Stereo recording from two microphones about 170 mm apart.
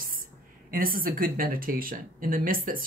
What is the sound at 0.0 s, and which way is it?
Speech, 55° right (ahead or behind).